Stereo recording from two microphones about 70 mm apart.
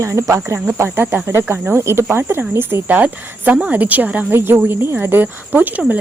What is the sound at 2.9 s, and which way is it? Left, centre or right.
Speech, right.